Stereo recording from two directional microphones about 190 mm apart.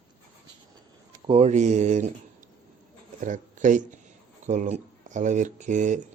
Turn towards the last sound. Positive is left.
turn(degrees=-40)  # may be behind; listen again after turning